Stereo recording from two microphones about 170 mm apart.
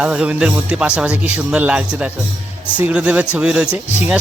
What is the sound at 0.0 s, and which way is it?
Speech, 5° right (ahead or behind).